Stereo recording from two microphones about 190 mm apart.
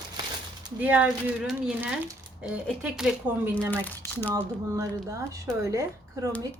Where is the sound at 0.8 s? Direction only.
10° right (ahead or behind).